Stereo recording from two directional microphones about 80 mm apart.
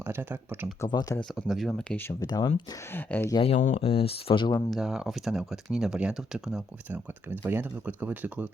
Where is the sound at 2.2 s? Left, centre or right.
Left.